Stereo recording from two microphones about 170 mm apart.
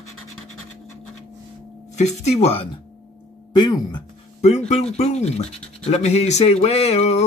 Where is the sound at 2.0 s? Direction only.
40° left (ahead or behind).